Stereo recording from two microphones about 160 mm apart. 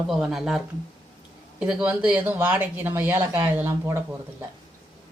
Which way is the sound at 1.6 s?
5° right (ahead or behind).